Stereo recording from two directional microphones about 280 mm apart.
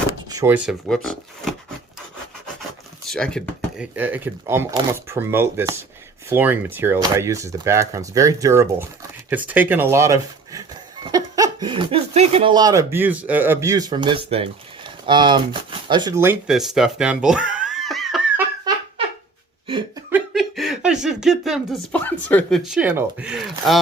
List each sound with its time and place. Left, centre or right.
0.3 s speech: centre
3.1 s speech: centre
14.8 s a sound: centre
15.9 s speech: centre
19.6 s a sound: centre
20.1 s speech: centre